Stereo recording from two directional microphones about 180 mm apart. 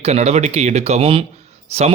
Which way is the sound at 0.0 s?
35° right (ahead or behind).